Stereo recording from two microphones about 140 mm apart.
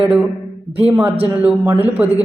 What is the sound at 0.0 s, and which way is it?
Speech, 10° right (ahead or behind).